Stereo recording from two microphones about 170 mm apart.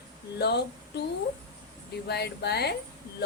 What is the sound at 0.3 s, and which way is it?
Speech, 75° left (ahead or behind).